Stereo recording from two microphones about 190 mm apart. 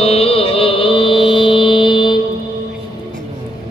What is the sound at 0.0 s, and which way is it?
Mantra, 30° left (ahead or behind).